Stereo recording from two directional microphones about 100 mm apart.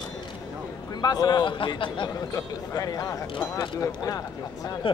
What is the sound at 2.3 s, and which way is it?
Speech, 35° left (ahead or behind).